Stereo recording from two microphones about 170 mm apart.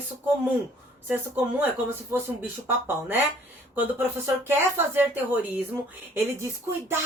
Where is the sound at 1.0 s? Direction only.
10° right (ahead or behind).